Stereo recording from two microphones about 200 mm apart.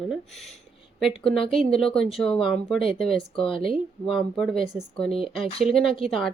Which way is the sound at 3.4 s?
25° left (ahead or behind).